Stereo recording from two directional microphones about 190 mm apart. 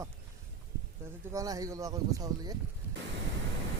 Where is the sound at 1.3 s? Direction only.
20° right (ahead or behind).